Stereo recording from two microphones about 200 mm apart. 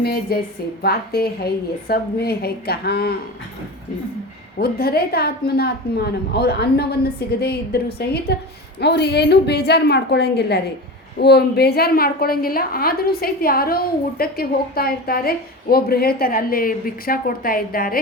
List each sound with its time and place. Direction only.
0.0 s a woman's voice: 50° left (ahead or behind)
4.5 s a woman's voice: 50° left (ahead or behind)